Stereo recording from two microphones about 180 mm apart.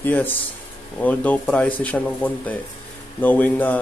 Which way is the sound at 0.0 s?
10° left (ahead or behind).